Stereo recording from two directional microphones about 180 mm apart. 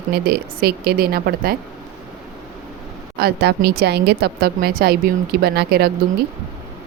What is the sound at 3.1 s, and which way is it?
Speech, 60° right (ahead or behind).